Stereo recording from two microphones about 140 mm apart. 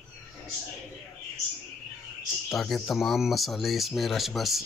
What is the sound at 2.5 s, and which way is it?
Speech, centre (ahead or behind).